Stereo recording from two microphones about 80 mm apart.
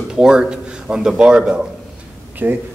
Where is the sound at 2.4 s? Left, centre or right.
Right.